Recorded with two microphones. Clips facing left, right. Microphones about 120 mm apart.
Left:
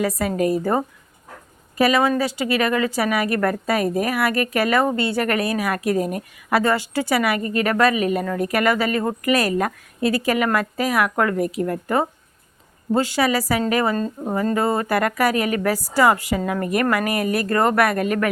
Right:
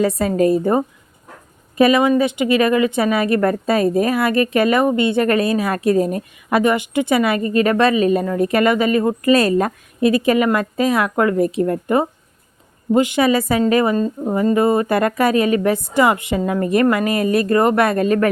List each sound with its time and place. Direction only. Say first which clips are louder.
0.0 s a woman's voice: right 5 dB; 25° right (ahead or behind)
6.6 s a woman's voice: right 5 dB; 20° right (ahead or behind)